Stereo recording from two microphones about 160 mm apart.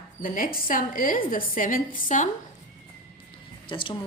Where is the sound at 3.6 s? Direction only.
30° left (ahead or behind).